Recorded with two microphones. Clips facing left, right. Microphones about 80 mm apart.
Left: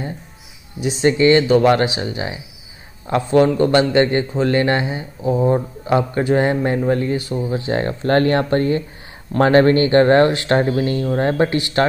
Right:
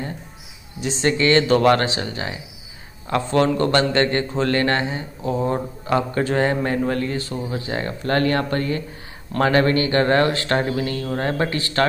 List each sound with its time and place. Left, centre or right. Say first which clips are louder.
1.0 s a man's voice: left 4 dB; centre
7.7 s speech: left 5 dB; left; by 11.8 s centre